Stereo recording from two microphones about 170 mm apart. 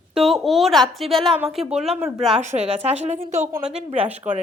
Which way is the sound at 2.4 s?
40° right (ahead or behind).